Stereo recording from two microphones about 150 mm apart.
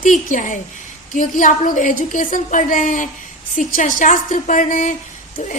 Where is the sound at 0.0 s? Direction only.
60° left (ahead or behind).